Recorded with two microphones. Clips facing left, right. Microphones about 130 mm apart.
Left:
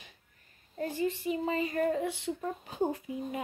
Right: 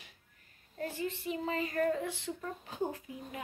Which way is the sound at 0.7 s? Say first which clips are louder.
Left 5 dB; 20° left (ahead or behind).